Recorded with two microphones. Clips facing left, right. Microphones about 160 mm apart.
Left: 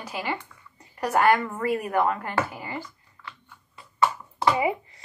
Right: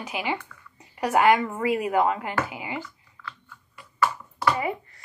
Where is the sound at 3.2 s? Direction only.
25° left (ahead or behind).